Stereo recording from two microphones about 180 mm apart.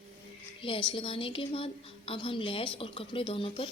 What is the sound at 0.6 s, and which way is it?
A woman's voice, 30° left (ahead or behind).